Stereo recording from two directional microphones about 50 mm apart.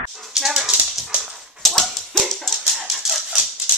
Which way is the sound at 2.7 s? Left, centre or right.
Centre.